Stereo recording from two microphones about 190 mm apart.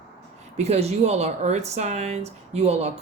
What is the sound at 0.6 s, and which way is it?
Speech, 35° right (ahead or behind).